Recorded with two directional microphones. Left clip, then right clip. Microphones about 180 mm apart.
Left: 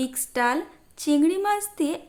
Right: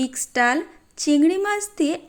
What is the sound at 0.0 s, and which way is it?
A woman's voice, 15° right (ahead or behind).